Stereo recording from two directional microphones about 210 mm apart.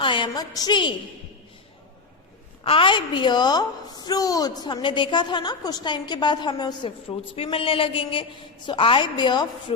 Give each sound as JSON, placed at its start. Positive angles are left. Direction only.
{"t": 0.0, "sound": "a woman's voice", "side_deg": 25}
{"t": 2.6, "sound": "a woman's voice", "side_deg": 25}